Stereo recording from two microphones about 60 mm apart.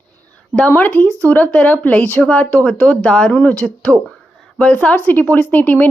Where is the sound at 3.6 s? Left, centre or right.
Centre.